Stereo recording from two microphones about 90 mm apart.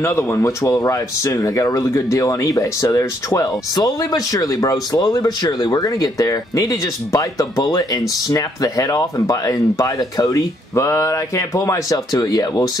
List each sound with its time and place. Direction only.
0.0 s speech: 30° left (ahead or behind)